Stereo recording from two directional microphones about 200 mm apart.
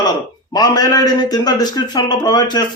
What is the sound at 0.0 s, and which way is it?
A man's voice, 20° left (ahead or behind).